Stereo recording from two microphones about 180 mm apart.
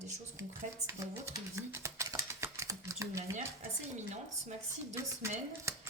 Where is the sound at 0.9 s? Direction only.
15° right (ahead or behind).